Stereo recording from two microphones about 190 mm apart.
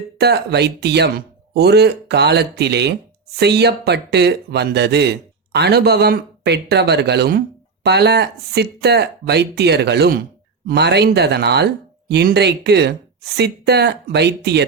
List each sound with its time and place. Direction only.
0.2 s a man's voice: 60° right (ahead or behind)